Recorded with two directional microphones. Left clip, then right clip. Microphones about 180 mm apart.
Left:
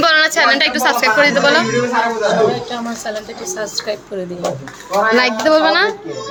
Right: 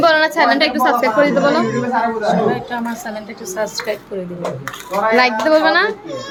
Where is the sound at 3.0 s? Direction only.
Centre (ahead or behind).